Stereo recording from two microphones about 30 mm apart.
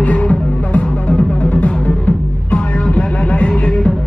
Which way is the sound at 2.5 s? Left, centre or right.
Left.